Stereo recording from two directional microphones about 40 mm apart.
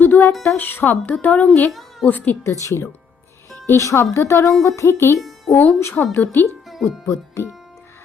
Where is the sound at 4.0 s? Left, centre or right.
Left.